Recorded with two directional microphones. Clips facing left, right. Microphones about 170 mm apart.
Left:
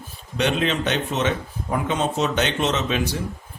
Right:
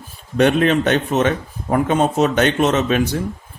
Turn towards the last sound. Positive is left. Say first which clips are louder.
# right 6 dB
turn(degrees=-50)  # may be behind; listen again after turning